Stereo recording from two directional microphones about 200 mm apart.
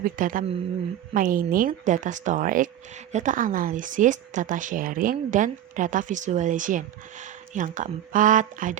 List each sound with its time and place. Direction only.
0.0 s speech: 45° right (ahead or behind)